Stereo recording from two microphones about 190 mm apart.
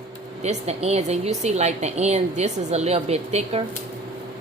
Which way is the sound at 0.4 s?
35° right (ahead or behind).